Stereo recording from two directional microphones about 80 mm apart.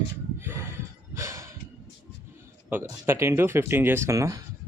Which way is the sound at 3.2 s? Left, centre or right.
Right.